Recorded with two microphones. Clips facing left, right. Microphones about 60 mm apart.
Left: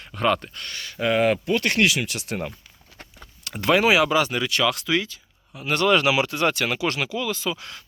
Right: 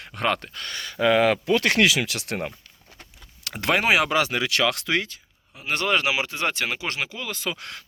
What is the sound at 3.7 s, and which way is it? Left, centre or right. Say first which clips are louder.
Speech: left 2 dB; right.